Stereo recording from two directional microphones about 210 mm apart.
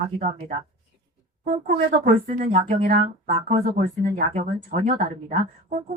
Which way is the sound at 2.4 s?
40° right (ahead or behind).